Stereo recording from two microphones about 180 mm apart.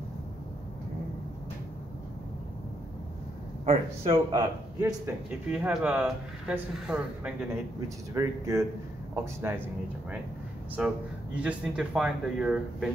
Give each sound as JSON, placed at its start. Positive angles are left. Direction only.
{"t": 3.6, "sound": "speech", "side_deg": -30}
{"t": 8.1, "sound": "speech", "side_deg": -15}
{"t": 11.4, "sound": "speech", "side_deg": -5}